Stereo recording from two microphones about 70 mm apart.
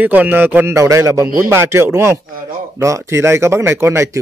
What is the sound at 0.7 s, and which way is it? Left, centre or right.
Speech, right.